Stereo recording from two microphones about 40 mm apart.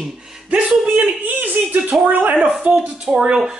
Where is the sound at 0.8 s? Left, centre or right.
Right.